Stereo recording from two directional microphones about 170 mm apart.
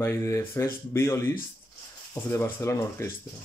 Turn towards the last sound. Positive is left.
turn(degrees=15)  # may be behind; listen again after turning